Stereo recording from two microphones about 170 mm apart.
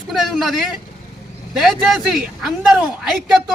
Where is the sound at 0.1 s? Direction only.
Centre (ahead or behind).